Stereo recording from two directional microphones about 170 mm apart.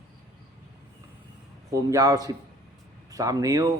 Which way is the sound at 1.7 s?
20° right (ahead or behind).